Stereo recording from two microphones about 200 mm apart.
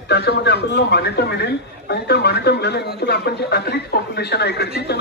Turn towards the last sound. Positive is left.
turn(degrees=55)  # may be behind; listen again after turning